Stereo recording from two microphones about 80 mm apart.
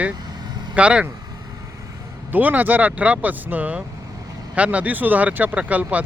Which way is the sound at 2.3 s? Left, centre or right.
Right.